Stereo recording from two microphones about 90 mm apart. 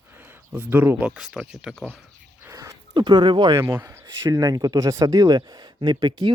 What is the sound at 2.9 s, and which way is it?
Speech, 55° right (ahead or behind).